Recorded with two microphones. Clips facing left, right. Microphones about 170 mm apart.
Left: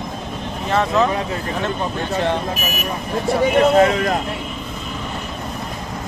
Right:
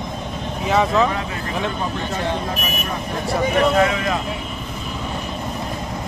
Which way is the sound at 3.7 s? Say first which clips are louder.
Left 4 dB; 35° left (ahead or behind).